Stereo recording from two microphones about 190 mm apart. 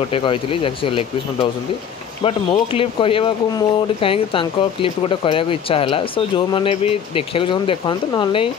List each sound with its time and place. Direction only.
0.1 s speech: 30° left (ahead or behind)